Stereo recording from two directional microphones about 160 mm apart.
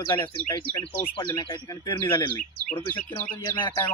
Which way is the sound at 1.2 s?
25° left (ahead or behind).